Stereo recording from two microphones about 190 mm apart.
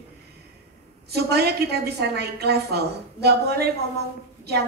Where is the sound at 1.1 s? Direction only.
60° right (ahead or behind).